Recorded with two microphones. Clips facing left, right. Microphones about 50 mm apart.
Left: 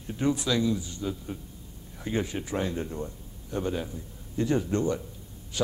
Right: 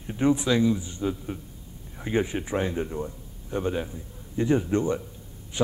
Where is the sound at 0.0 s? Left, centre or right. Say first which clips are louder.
Right 4 dB; right.